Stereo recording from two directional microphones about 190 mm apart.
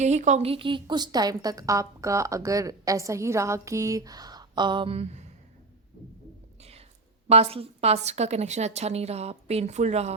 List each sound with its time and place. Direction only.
0.0 s a woman's voice: 40° right (ahead or behind)
6.6 s a sound: 35° right (ahead or behind)
7.3 s a woman's voice: 30° right (ahead or behind)